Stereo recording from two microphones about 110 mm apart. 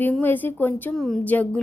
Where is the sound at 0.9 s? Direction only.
5° left (ahead or behind).